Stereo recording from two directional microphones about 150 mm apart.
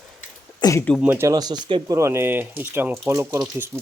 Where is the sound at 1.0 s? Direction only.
15° right (ahead or behind).